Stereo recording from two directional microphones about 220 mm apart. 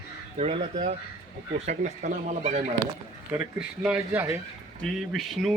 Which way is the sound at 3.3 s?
5° right (ahead or behind).